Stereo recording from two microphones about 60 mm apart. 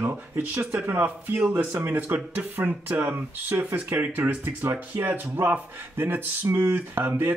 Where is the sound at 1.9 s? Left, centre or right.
Right.